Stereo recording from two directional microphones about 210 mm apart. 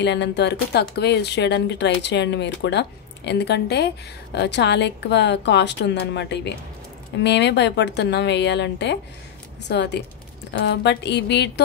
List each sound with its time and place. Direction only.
0.0 s speech: 55° left (ahead or behind)